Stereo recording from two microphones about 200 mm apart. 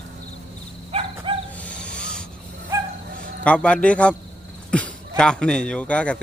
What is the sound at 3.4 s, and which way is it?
A man's voice, 5° left (ahead or behind).